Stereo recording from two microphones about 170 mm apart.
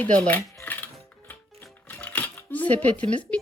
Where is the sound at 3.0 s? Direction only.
40° right (ahead or behind).